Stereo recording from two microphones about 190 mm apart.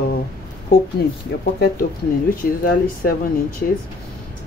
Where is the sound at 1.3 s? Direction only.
55° left (ahead or behind).